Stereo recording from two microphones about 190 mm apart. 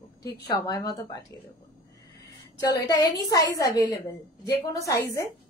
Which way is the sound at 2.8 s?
20° left (ahead or behind).